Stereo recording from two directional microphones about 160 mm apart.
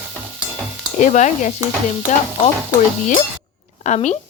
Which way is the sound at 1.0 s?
50° left (ahead or behind).